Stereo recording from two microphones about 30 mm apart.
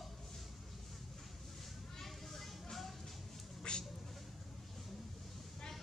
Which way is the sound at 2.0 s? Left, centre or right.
Centre.